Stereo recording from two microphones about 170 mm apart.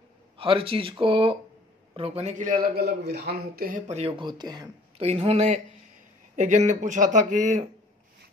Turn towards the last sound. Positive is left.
turn(degrees=-45)  # may be behind; listen again after turning